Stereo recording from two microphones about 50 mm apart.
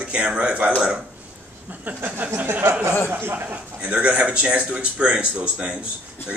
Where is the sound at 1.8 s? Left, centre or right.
Right.